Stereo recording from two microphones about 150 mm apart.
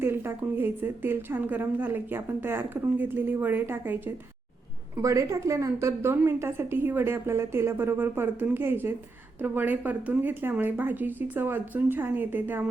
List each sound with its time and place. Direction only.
0.0 s a woman's voice: 15° right (ahead or behind)